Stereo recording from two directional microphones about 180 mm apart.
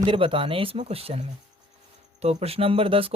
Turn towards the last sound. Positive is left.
turn(degrees=-30)  # may be behind; listen again after turning